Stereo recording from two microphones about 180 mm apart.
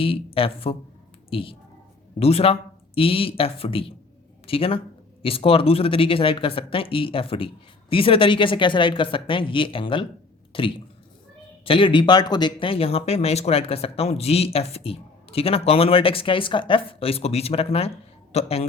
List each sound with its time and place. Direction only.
0.0 s speech: 30° left (ahead or behind)